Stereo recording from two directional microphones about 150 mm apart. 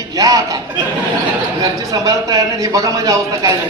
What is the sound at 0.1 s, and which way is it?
Speech, 25° right (ahead or behind).